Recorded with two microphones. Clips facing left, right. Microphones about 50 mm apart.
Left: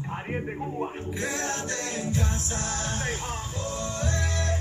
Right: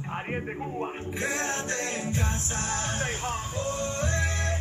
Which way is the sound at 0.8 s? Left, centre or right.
Right.